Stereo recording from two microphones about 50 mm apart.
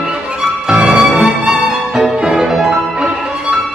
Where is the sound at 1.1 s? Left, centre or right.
Right.